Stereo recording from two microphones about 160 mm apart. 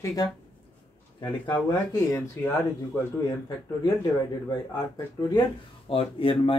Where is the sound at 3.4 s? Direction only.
25° left (ahead or behind).